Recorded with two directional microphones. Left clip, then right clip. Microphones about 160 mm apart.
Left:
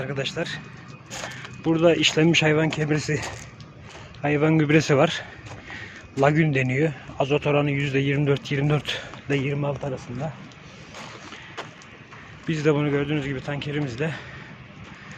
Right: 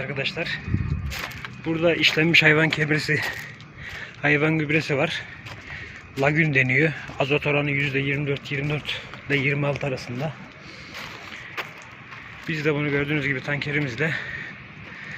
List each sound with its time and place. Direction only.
0.0 s a man's voice: 25° left (ahead or behind)
1.6 s a man's voice: 30° left (ahead or behind)
4.5 s a man's voice: 40° left (ahead or behind)
9.4 s a man's voice: centre (ahead or behind)
12.5 s speech: 30° left (ahead or behind); by 14.3 s 5° left (ahead or behind)